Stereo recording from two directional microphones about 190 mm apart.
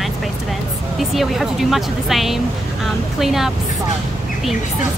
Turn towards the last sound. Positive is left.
turn(degrees=0)  # may be behind; listen again after turning